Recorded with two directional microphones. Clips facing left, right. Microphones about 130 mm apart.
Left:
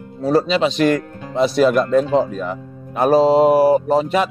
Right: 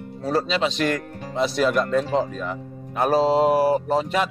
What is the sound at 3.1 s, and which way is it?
Speech, 15° left (ahead or behind).